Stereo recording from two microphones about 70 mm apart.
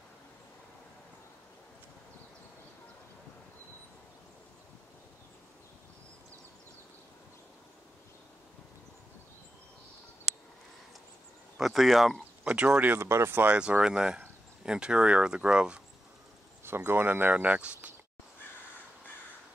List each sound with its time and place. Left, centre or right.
11.5 s speech: centre
12.4 s speech: centre
12.9 s speech: right
13.5 s speech: centre
16.6 s speech: right